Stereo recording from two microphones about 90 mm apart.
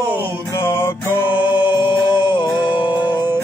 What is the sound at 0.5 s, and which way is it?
Music, 30° left (ahead or behind).